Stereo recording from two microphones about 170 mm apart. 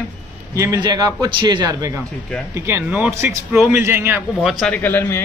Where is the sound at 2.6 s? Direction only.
10° right (ahead or behind).